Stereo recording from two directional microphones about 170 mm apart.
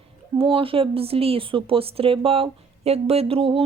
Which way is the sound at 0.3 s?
30° right (ahead or behind).